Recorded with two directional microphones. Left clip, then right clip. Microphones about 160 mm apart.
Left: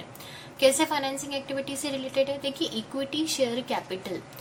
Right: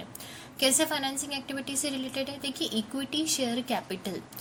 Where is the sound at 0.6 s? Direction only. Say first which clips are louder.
Left 4 dB; 40° right (ahead or behind).